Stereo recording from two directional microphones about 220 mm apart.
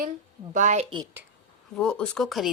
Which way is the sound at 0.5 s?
30° right (ahead or behind).